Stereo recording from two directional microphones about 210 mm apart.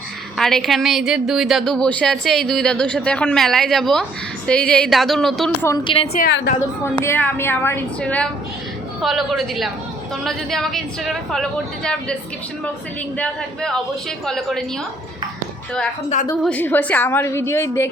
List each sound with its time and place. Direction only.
0.3 s speech: centre (ahead or behind)
5.6 s a woman's voice: 20° left (ahead or behind)
6.8 s a woman's voice: 10° left (ahead or behind)
13.1 s speech: 5° left (ahead or behind)
16.4 s a woman's voice: 10° left (ahead or behind)